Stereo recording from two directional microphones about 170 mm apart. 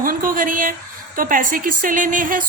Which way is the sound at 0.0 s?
55° right (ahead or behind).